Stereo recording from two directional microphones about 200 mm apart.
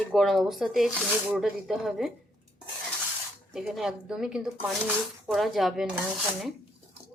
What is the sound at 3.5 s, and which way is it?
Speech, centre (ahead or behind).